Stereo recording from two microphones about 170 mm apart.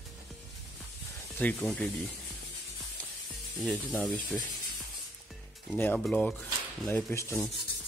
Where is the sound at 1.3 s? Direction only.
10° left (ahead or behind).